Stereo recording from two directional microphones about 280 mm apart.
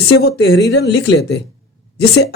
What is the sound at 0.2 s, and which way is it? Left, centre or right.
Speech, left.